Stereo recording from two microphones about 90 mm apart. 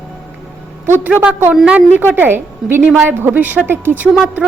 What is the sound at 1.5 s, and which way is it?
Speech, 10° right (ahead or behind).